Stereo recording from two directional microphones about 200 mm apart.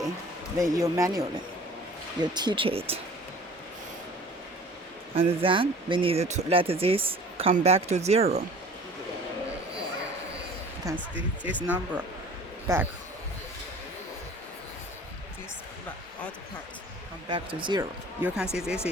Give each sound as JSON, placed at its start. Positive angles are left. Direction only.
{"t": 0.6, "sound": "speech", "side_deg": -15}
{"t": 5.1, "sound": "speech", "side_deg": -25}
{"t": 10.8, "sound": "speech", "side_deg": -15}
{"t": 17.2, "sound": "speech", "side_deg": -25}
{"t": 18.2, "sound": "speech", "side_deg": -5}